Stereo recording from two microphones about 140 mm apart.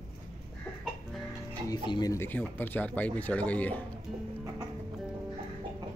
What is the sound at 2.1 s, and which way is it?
Speech, 15° left (ahead or behind).